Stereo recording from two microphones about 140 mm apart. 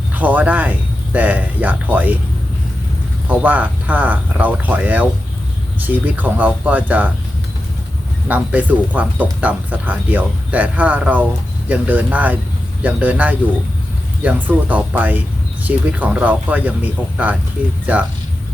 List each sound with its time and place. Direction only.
0.1 s a sound: 10° right (ahead or behind)
3.2 s speech: 10° right (ahead or behind)
8.3 s speech: 10° right (ahead or behind)